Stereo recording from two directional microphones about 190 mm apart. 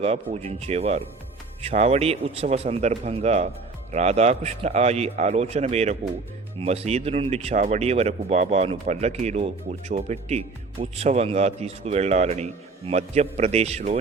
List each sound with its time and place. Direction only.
0.0 s speech: 35° right (ahead or behind)